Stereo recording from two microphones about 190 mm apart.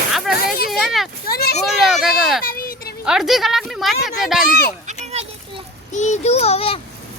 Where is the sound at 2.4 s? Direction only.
50° left (ahead or behind).